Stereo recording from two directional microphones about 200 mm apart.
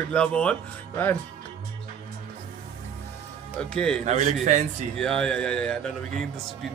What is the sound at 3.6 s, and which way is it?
Speech, 5° left (ahead or behind).